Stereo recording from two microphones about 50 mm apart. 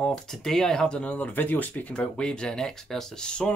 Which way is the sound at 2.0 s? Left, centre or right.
Centre.